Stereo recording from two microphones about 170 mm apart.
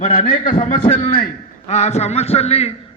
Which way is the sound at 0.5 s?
50° left (ahead or behind).